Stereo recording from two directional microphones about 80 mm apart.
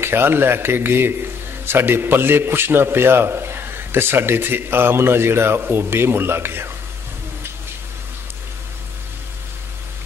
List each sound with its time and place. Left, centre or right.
0.0 s a man's voice: right